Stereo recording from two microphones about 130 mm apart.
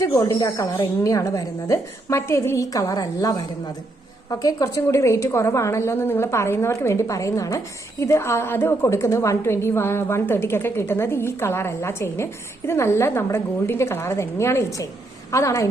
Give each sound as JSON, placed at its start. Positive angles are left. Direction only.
{"t": 0.3, "sound": "a woman's voice", "side_deg": 30}